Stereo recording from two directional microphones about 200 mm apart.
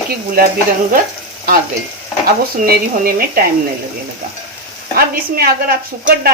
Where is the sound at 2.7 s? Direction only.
50° right (ahead or behind).